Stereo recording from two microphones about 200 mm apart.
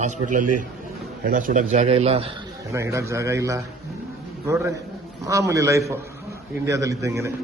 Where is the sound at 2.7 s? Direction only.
15° right (ahead or behind).